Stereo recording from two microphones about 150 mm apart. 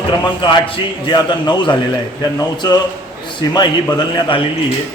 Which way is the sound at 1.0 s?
30° left (ahead or behind).